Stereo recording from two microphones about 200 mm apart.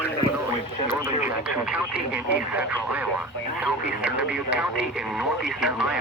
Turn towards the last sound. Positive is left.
turn(degrees=-5)  # may be behind; listen again after turning